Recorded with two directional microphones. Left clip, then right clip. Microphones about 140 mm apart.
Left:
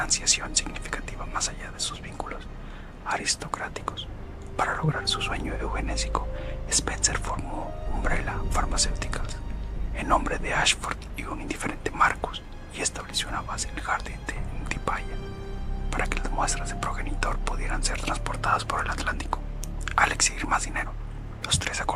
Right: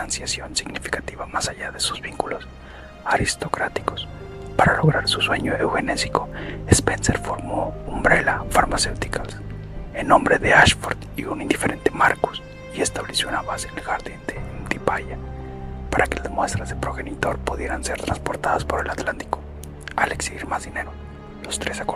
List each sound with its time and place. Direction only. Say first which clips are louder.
0.0 s speech: left 2 dB; 35° right (ahead or behind)